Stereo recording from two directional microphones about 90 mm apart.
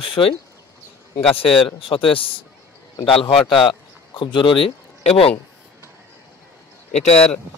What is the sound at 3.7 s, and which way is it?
Speech, 60° left (ahead or behind).